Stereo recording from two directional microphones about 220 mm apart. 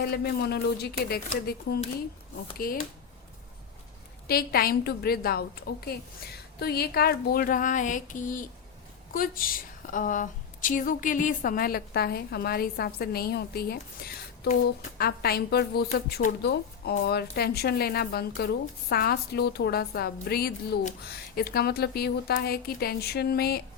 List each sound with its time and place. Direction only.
0.0 s a woman's voice: 45° left (ahead or behind)
4.3 s a woman's voice: 45° left (ahead or behind)